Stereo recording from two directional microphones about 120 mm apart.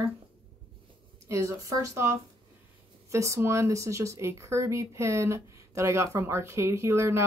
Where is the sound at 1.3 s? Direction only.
25° right (ahead or behind).